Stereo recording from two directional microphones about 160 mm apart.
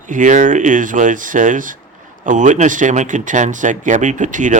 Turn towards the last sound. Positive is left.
turn(degrees=-50)  # may be behind; listen again after turning